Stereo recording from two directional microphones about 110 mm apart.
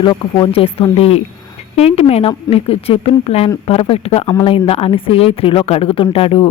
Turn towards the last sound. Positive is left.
turn(degrees=60)  # may be behind; listen again after turning